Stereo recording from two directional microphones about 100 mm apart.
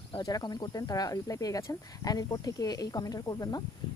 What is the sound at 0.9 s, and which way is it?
Speech, 35° left (ahead or behind).